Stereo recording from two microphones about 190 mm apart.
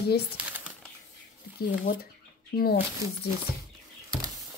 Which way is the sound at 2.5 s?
50° left (ahead or behind).